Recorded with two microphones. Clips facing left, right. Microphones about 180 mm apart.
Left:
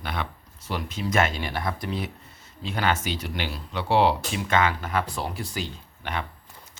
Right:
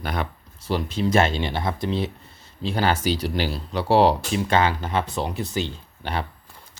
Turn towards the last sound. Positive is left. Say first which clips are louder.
# right 3 dB
turn(degrees=-35)  # may be behind; listen again after turning